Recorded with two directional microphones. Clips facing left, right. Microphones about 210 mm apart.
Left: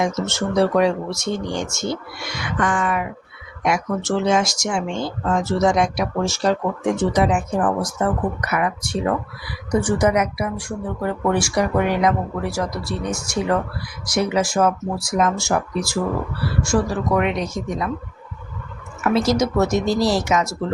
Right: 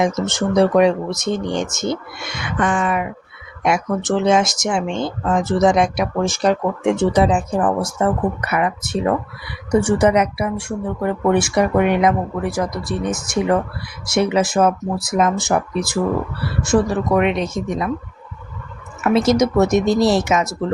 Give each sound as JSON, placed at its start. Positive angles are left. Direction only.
{"t": 0.3, "sound": "speech", "side_deg": -15}
{"t": 19.0, "sound": "speech", "side_deg": -20}